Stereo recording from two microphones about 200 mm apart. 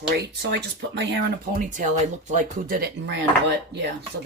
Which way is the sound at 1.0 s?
50° right (ahead or behind).